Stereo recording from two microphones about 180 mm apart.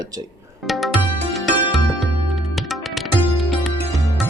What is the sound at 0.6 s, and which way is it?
Music, centre (ahead or behind).